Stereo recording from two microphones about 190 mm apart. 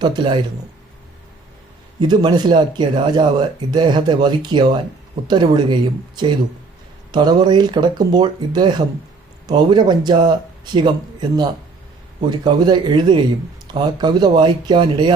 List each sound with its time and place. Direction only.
0.0 s speech: 25° right (ahead or behind)
2.0 s speech: 25° right (ahead or behind)